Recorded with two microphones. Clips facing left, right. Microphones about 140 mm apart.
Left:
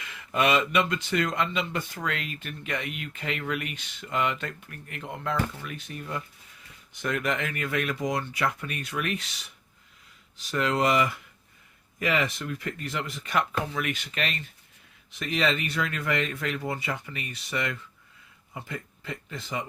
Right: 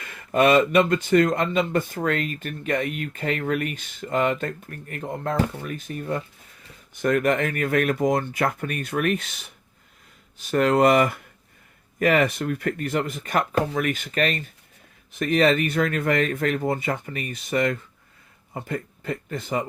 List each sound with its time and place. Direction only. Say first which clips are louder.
0.0 s speech: right 6 dB; 50° right (ahead or behind)